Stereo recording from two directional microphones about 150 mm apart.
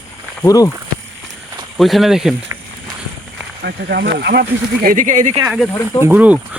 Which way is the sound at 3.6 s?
90° right.